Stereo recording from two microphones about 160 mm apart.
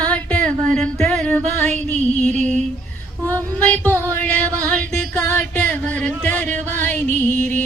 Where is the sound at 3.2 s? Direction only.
10° left (ahead or behind).